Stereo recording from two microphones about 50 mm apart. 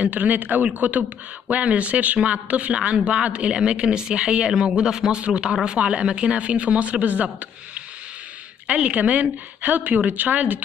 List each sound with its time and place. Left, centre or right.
0.0 s a woman's voice: right